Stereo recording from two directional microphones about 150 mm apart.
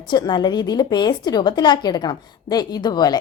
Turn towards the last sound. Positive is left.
turn(degrees=30)  # may be behind; listen again after turning